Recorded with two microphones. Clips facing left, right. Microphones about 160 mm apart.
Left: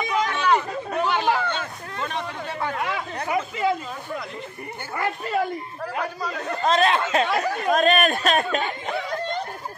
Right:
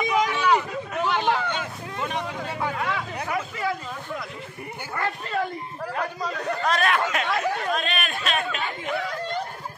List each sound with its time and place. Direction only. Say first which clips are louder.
0.0 s a sound: right 1 dB; 15° right (ahead or behind); by 1.4 s 5° left (ahead or behind)
1.4 s speech: left 1 dB; 15° right (ahead or behind)
3.3 s speech: left 6 dB; 20° left (ahead or behind)
4.9 s speech: left 3 dB; 10° left (ahead or behind)
6.6 s speech: left 4 dB; 25° left (ahead or behind)
7.7 s speech: left 9 dB; 45° left (ahead or behind)